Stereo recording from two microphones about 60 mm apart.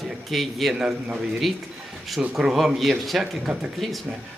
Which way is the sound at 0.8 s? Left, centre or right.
Centre.